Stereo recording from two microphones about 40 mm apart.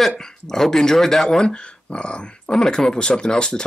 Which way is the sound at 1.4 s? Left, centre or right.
Left.